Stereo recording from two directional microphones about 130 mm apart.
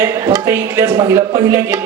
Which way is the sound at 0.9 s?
30° right (ahead or behind).